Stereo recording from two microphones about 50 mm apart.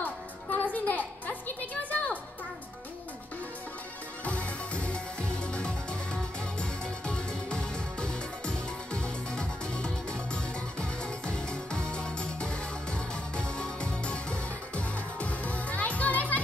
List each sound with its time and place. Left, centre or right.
0.0 s music: left
4.2 s music: left